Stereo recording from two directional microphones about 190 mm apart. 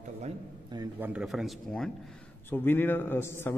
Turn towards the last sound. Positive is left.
turn(degrees=10)  # may be behind; listen again after turning